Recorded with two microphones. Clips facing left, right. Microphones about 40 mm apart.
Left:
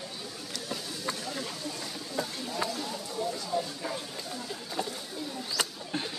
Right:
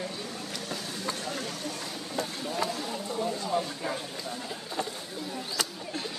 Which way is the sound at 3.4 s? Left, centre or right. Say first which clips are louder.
Right 3 dB; right.